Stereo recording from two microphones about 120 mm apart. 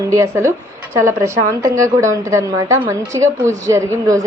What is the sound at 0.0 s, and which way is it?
A woman's voice, 25° right (ahead or behind).